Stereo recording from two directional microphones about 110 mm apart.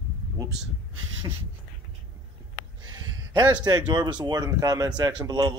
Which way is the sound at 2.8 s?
40° right (ahead or behind).